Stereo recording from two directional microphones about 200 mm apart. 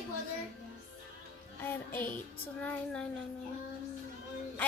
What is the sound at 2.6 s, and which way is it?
Child singing, 5° left (ahead or behind).